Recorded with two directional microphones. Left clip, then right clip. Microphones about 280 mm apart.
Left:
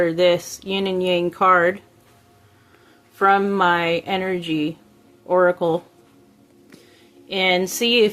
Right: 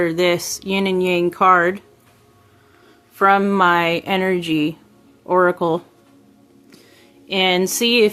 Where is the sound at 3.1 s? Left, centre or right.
Right.